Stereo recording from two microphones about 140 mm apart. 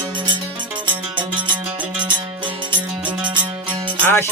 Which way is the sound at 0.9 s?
35° right (ahead or behind).